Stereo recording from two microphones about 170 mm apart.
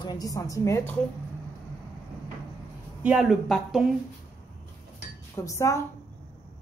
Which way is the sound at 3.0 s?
5° right (ahead or behind).